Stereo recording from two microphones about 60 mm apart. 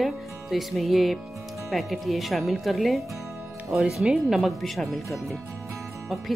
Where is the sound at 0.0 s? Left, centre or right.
Centre.